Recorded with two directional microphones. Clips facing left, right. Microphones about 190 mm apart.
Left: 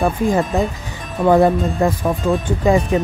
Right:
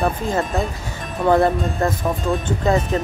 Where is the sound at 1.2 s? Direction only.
10° left (ahead or behind).